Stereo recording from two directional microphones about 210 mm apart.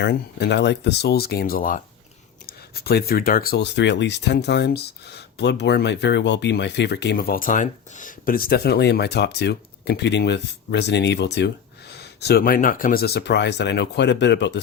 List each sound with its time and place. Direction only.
0.0 s speech: 50° left (ahead or behind)